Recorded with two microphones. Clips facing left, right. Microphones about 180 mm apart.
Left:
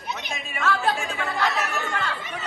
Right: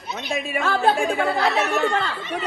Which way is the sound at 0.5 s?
30° right (ahead or behind).